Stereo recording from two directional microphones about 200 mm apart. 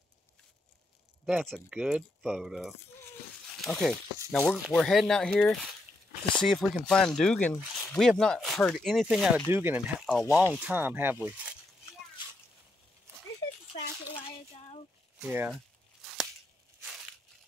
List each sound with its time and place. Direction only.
1.2 s speech: centre (ahead or behind)
13.7 s a sound: 25° left (ahead or behind)
15.1 s speech: 5° right (ahead or behind)